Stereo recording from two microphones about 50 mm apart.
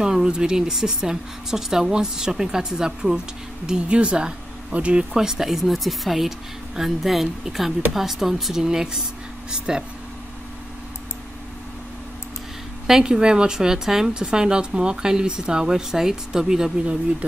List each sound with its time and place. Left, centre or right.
0.0 s a woman's voice: centre
5.1 s a woman's voice: centre
12.8 s a woman's voice: centre
17.2 s speech: right